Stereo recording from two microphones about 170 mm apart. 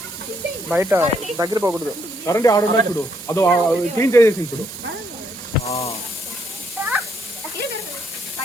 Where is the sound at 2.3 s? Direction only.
20° left (ahead or behind).